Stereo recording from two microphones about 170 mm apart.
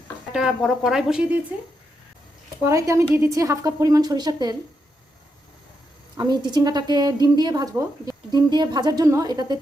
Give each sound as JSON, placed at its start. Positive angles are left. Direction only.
{"t": 0.3, "sound": "speech", "side_deg": 0}
{"t": 2.6, "sound": "a woman's voice", "side_deg": -15}
{"t": 6.1, "sound": "a woman's voice", "side_deg": -25}